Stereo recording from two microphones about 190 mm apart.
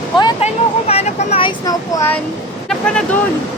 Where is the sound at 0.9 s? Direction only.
35° left (ahead or behind); by 2.2 s 15° left (ahead or behind).